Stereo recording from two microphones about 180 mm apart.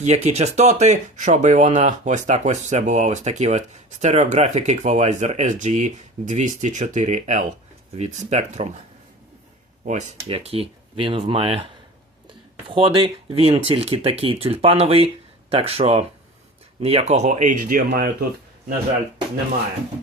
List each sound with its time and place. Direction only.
0.0 s speech: 35° right (ahead or behind)
9.8 s speech: 40° right (ahead or behind)